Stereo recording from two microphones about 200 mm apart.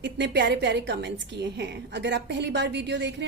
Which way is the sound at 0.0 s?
65° right (ahead or behind).